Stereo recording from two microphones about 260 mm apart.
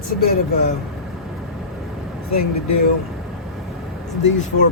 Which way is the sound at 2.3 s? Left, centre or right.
Left.